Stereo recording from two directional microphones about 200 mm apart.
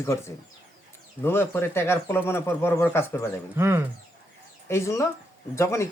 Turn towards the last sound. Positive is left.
turn(degrees=15)  # may be behind; listen again after turning